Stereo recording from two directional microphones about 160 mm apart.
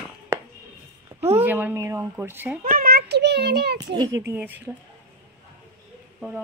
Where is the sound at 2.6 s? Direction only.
65° right (ahead or behind); by 3.8 s 90° right.